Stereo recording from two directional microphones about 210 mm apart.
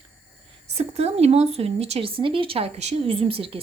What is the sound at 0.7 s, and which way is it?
Speech, 30° right (ahead or behind).